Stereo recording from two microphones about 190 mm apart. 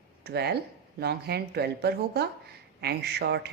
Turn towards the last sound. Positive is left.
turn(degrees=-60)  # may be behind; listen again after turning